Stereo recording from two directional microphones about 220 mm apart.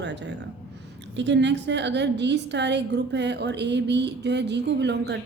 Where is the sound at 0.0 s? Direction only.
50° right (ahead or behind).